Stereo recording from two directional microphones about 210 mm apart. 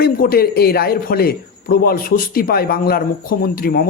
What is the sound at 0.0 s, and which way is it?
A man's voice, 45° left (ahead or behind).